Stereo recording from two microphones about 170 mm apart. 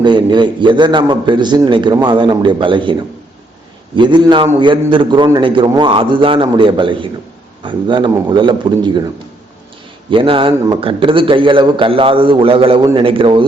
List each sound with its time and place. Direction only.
0.0 s a man's voice: 25° right (ahead or behind)
3.9 s a man's voice: 25° right (ahead or behind)
10.1 s a man's voice: 30° right (ahead or behind)